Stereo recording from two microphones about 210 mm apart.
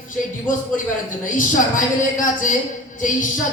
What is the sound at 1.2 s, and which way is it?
Speech, 40° left (ahead or behind).